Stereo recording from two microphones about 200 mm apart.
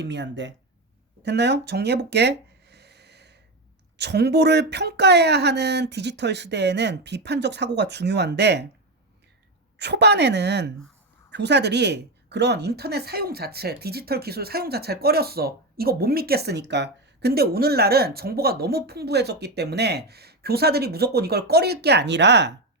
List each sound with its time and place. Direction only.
0.0 s speech: 60° right (ahead or behind)
1.2 s a sound: 60° right (ahead or behind)
3.9 s speech: 55° right (ahead or behind)
9.7 s speech: 55° right (ahead or behind)